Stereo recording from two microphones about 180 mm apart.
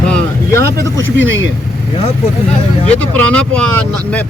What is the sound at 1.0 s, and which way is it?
Speech, 90° right.